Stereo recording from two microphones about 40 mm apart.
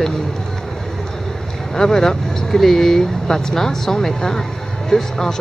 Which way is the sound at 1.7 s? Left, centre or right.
Centre.